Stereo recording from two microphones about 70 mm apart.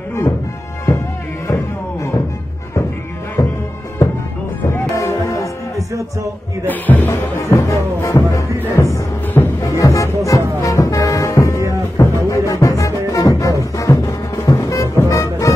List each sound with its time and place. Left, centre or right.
1.5 s music: left
3.4 s music: left
4.9 s music: left
6.7 s music: left